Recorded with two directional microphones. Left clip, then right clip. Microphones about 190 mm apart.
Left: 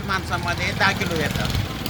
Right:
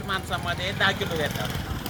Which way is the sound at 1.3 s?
40° left (ahead or behind).